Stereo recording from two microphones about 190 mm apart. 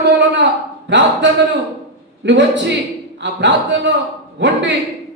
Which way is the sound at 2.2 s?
70° right (ahead or behind).